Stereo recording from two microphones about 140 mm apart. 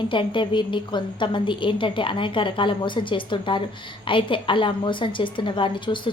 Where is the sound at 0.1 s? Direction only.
35° left (ahead or behind).